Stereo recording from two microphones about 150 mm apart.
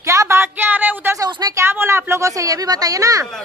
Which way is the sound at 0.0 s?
20° right (ahead or behind).